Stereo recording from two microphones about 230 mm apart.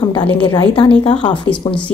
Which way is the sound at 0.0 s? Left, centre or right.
Centre.